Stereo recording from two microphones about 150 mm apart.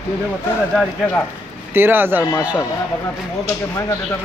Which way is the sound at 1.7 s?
15° right (ahead or behind).